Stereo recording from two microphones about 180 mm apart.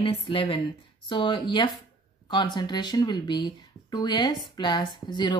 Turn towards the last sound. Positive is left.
turn(degrees=25)  # may be behind; listen again after turning